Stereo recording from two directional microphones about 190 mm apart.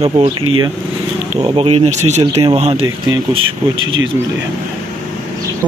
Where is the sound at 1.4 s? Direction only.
25° right (ahead or behind).